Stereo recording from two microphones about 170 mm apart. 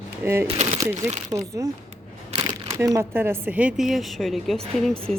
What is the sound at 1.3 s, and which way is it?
Speech, 25° right (ahead or behind).